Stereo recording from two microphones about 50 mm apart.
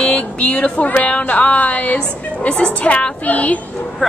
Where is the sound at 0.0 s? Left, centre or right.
Left.